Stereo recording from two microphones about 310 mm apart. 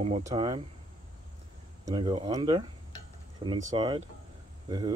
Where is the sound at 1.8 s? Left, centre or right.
Centre.